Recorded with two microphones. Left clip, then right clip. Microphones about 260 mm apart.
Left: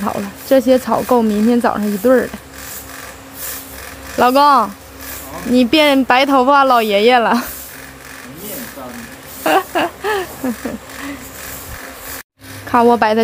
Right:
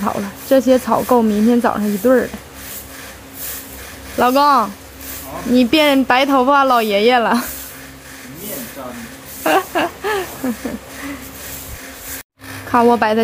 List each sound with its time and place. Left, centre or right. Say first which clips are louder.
0.0 s speech: even; centre
4.2 s speech: left 2 dB; centre
5.5 s speech: left 1 dB; centre
9.4 s a sound: left 1 dB; centre
12.7 s speech: left 1 dB; centre